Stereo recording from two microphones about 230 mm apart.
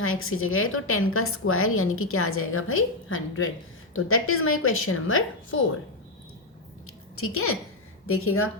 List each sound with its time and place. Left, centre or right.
0.0 s a woman's voice: left
6.8 s a sound: left
8.0 s speech: left